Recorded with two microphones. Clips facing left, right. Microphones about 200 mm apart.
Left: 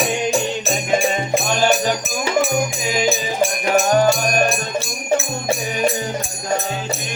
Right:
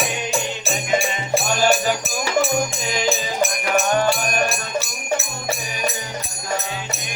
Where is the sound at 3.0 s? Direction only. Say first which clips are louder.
Left 2 dB; 30° left (ahead or behind).